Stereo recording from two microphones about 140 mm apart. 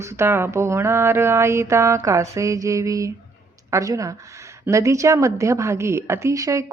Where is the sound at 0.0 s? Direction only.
20° right (ahead or behind).